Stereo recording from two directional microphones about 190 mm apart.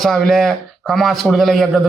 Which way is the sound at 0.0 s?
Centre (ahead or behind).